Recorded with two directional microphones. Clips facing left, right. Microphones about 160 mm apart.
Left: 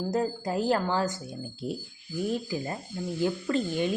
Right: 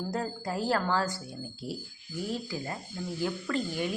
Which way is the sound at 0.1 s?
20° left (ahead or behind).